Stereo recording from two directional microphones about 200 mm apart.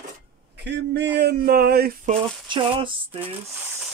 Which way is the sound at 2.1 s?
25° right (ahead or behind).